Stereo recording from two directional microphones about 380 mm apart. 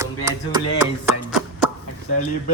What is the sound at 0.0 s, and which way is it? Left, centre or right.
Speech, centre.